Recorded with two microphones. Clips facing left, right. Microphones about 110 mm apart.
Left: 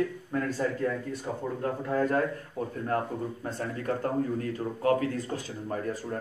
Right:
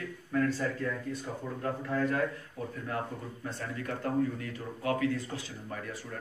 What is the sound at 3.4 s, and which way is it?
A man's voice, 40° left (ahead or behind).